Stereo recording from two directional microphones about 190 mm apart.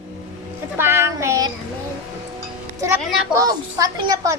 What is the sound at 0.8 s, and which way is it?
Speech, 10° right (ahead or behind).